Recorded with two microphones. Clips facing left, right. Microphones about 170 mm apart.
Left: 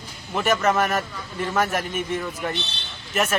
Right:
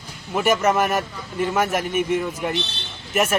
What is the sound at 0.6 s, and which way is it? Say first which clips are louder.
Speech: right 2 dB; 15° right (ahead or behind).